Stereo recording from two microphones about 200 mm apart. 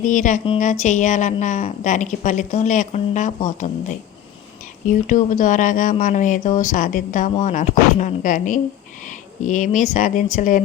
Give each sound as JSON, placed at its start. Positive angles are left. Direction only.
{"t": 0.0, "sound": "a woman's voice", "side_deg": 40}
{"t": 4.9, "sound": "a woman's voice", "side_deg": 40}